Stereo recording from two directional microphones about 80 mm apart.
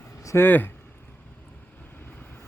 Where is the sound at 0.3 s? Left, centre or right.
Left.